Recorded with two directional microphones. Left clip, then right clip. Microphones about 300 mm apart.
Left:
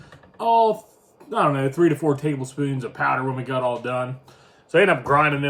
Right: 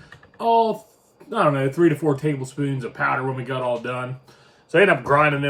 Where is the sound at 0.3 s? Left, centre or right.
Centre.